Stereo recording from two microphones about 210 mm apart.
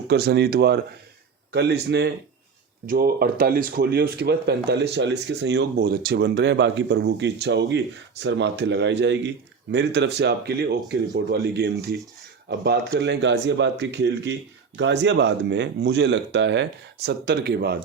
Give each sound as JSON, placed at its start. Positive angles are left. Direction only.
{"t": 0.1, "sound": "speech", "side_deg": -50}